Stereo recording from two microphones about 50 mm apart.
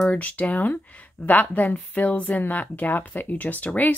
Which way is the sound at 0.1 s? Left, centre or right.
Left.